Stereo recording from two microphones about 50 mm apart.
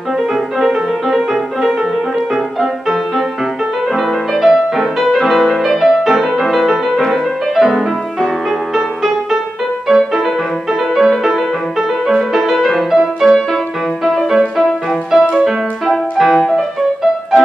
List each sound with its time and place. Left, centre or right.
0.3 s music: centre
12.9 s music: centre